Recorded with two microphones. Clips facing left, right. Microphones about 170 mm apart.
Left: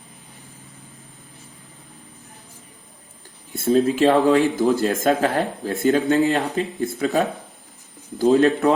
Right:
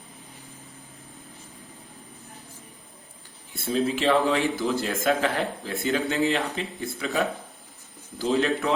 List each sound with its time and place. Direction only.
3.6 s speech: 45° left (ahead or behind)